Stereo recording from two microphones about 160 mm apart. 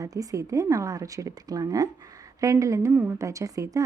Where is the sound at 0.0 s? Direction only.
20° right (ahead or behind).